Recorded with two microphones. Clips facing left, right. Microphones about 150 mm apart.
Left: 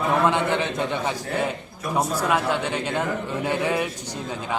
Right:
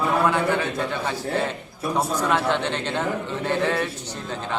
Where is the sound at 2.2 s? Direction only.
10° left (ahead or behind).